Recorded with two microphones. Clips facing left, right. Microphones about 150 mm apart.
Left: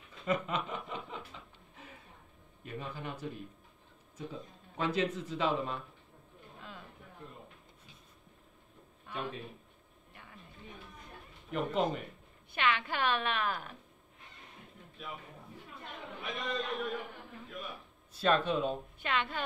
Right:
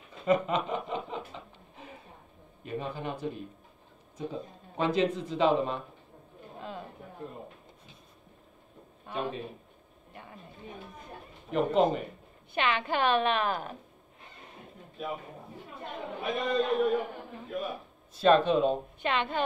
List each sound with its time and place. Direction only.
0.1 s chuckle: 25° right (ahead or behind)
2.6 s a man's voice: 25° right (ahead or behind)
6.5 s a sound: 35° right (ahead or behind)
9.0 s a man's voice: 30° right (ahead or behind)
10.1 s chatter: 35° right (ahead or behind)
11.6 s a man's voice: 25° right (ahead or behind)
15.0 s a sound: 40° right (ahead or behind)
17.5 s speech: 40° right (ahead or behind)
18.2 s a man's voice: 25° right (ahead or behind)